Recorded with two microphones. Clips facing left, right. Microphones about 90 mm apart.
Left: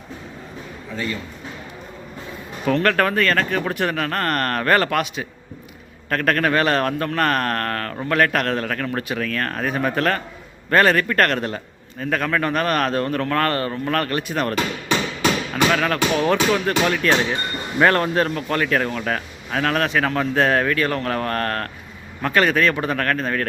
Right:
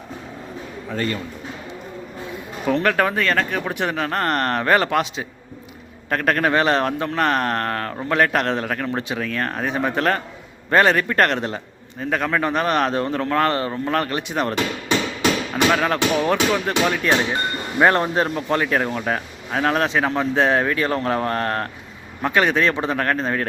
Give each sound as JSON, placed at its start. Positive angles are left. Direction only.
{"t": 2.6, "sound": "speech", "side_deg": -15}
{"t": 15.7, "sound": "speech", "side_deg": -20}